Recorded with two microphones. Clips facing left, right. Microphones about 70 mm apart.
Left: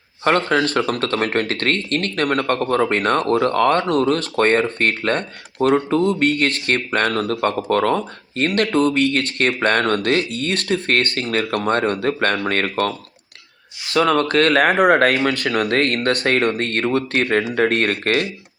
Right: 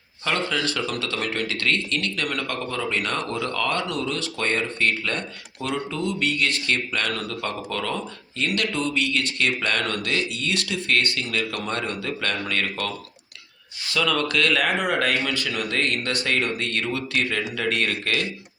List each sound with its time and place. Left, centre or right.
0.3 s speech: left
13.9 s speech: left